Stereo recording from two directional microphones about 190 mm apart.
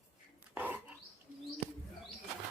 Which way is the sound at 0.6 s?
10° right (ahead or behind).